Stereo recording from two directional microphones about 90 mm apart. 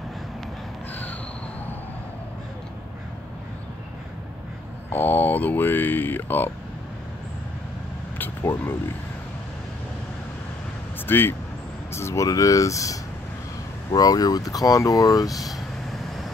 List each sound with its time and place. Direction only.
4.8 s speech: 25° left (ahead or behind)
8.2 s a sound: 25° left (ahead or behind)
11.1 s speech: 25° left (ahead or behind); by 15.5 s 45° left (ahead or behind)